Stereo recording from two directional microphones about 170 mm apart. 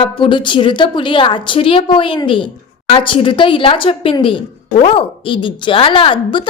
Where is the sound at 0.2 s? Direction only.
30° left (ahead or behind).